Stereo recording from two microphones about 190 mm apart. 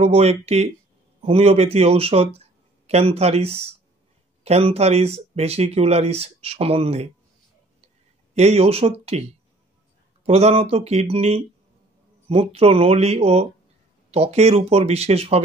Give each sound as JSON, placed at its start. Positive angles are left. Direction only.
{"t": 0.0, "sound": "speech", "side_deg": -35}
{"t": 8.4, "sound": "speech", "side_deg": -35}